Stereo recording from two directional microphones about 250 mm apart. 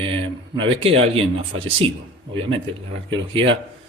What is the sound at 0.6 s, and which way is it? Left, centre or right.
Speech, right.